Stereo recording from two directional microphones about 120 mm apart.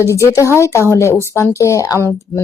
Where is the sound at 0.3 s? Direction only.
25° left (ahead or behind).